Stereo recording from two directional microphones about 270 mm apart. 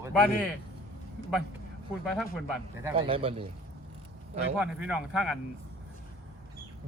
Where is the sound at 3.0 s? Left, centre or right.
Right.